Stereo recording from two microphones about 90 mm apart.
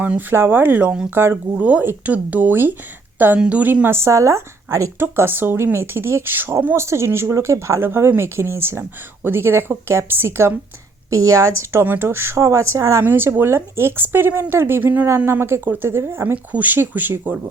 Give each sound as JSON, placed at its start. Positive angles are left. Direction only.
{"t": 0.0, "sound": "speech", "side_deg": -20}
{"t": 4.9, "sound": "speech", "side_deg": -25}